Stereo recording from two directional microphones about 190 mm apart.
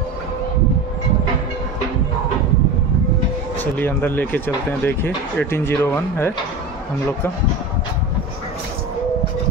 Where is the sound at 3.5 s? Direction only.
10° left (ahead or behind).